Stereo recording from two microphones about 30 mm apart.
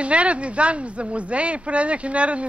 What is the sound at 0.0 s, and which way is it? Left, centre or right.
A man's voice, right.